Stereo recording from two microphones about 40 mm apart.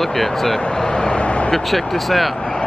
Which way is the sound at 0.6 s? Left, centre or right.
Left.